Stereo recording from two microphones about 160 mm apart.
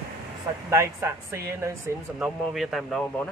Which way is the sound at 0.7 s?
20° right (ahead or behind).